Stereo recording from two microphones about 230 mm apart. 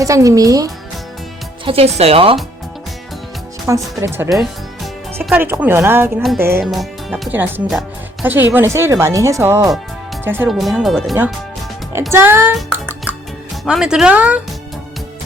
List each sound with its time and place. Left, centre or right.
0.0 s speech: centre
1.6 s speech: right
3.7 s speech: centre
12.1 s speech: centre
12.5 s music: centre
13.7 s speech: centre